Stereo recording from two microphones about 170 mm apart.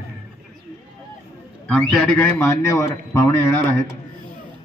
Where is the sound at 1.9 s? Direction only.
5° left (ahead or behind).